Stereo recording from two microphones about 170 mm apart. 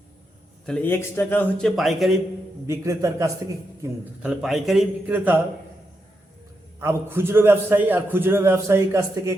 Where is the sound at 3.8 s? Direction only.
5° right (ahead or behind).